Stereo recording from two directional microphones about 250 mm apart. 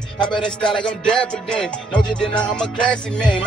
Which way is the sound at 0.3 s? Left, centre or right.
Centre.